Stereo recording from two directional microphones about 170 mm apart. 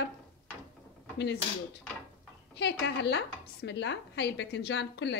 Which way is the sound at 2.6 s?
80° left.